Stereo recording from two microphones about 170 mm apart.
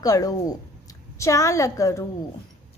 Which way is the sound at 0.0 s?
20° left (ahead or behind).